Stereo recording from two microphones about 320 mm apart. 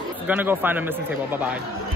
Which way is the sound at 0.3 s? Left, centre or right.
Centre.